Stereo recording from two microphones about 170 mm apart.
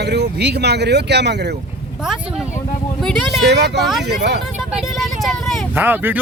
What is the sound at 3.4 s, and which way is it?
Speech, 80° right.